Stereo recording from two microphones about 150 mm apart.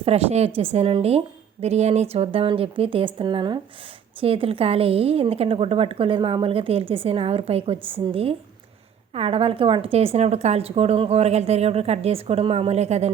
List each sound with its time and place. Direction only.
0.0 s a woman's voice: 45° right (ahead or behind)